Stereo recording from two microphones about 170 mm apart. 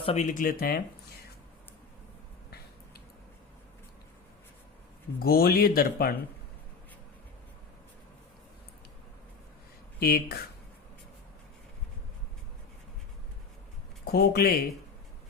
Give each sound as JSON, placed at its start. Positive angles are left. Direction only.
{"t": 0.0, "sound": "speech", "side_deg": 40}
{"t": 5.2, "sound": "speech", "side_deg": 65}
{"t": 10.0, "sound": "speech", "side_deg": 65}
{"t": 14.0, "sound": "speech", "side_deg": 65}